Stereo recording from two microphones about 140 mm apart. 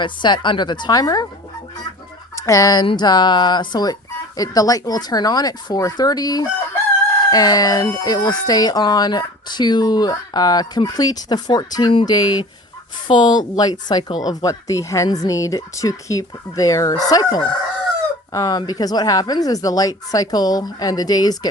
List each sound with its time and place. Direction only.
0.0 s a woman's voice: 35° left (ahead or behind)
2.3 s a woman's voice: 25° left (ahead or behind)